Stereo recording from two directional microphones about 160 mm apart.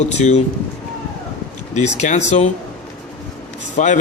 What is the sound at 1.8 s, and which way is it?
Speech, 45° left (ahead or behind).